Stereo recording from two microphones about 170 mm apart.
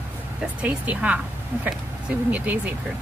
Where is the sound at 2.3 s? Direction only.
10° right (ahead or behind).